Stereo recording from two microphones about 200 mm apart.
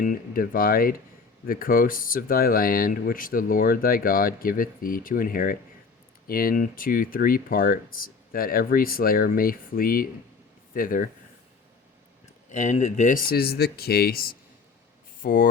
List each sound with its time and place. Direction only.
0.0 s speech: 45° left (ahead or behind)
12.5 s speech: 35° left (ahead or behind)